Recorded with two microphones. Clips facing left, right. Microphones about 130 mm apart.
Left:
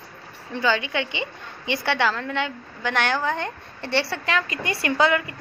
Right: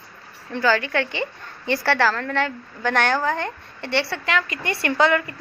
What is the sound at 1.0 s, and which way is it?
Speech, 40° right (ahead or behind).